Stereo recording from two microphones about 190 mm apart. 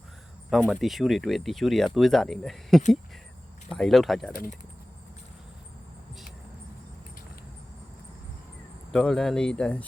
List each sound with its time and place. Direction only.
0.5 s speech: centre (ahead or behind)
4.3 s speech: 45° left (ahead or behind)
8.9 s speech: 5° left (ahead or behind)